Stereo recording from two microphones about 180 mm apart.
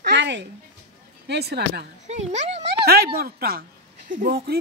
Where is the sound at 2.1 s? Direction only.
40° right (ahead or behind).